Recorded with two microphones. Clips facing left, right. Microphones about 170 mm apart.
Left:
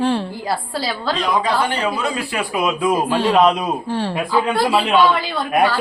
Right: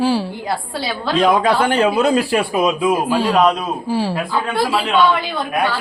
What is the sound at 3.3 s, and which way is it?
Speech, 10° left (ahead or behind).